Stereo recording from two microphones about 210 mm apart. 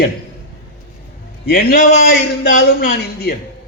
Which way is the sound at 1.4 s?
45° left (ahead or behind).